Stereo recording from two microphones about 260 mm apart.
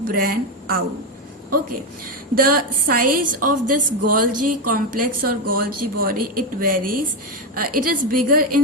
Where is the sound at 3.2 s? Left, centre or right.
Right.